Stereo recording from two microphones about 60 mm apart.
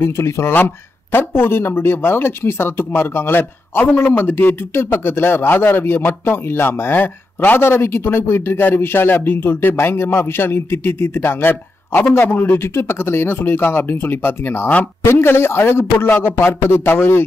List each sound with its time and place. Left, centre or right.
0.0 s speech: left
7.6 s speech: left